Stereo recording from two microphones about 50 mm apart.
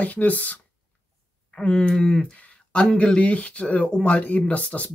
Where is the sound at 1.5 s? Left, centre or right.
Left.